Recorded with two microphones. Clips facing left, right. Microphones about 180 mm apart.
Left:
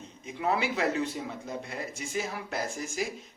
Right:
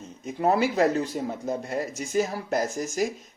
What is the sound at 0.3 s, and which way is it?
Speech, 40° right (ahead or behind).